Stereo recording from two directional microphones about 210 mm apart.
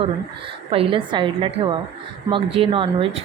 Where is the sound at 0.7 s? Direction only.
25° right (ahead or behind).